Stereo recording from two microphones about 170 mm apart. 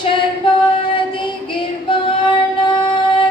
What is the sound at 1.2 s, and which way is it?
Singing, 30° left (ahead or behind).